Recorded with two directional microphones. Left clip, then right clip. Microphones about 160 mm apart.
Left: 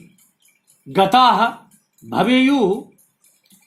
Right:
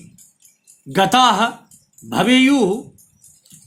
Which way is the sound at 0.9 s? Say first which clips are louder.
Left 1 dB; 40° right (ahead or behind).